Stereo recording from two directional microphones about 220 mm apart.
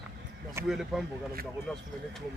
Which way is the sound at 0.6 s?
Centre (ahead or behind).